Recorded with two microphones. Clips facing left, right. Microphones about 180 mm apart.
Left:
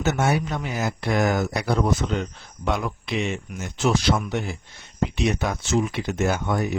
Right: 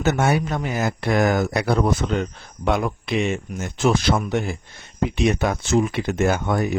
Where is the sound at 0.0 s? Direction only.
60° right (ahead or behind).